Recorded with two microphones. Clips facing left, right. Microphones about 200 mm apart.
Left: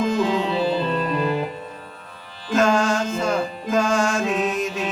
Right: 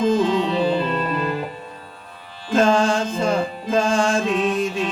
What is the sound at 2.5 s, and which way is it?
Music, 30° right (ahead or behind).